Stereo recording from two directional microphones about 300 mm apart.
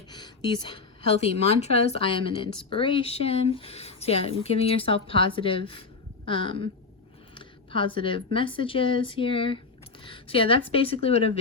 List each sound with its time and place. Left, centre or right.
0.1 s a woman's voice: centre